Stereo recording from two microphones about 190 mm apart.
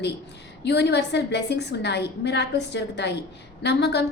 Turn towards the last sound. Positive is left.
turn(degrees=65)  # may be behind; listen again after turning